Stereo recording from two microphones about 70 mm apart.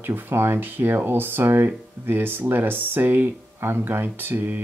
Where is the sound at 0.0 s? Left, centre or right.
Right.